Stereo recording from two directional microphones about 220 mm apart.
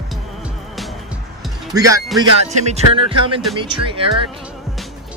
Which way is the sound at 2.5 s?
30° right (ahead or behind).